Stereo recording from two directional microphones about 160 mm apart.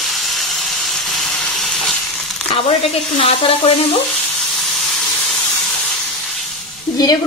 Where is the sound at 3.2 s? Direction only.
40° left (ahead or behind).